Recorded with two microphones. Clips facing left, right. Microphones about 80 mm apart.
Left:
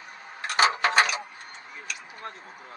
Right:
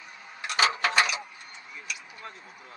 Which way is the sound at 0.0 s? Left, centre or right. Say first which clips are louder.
Left 3 dB; left.